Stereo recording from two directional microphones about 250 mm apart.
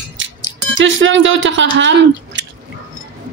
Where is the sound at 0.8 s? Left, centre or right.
Right.